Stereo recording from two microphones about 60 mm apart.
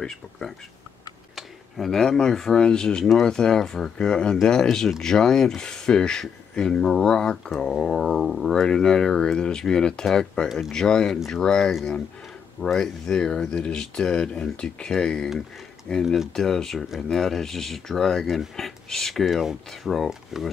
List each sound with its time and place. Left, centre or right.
0.0 s speech: centre